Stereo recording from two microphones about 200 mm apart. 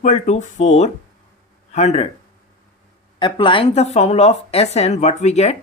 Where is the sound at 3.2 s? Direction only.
25° left (ahead or behind).